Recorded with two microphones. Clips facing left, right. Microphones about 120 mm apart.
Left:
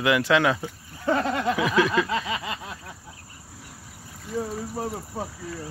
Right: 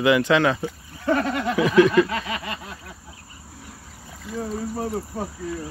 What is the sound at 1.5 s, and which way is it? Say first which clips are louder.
Speech: right 8 dB; 5° left (ahead or behind).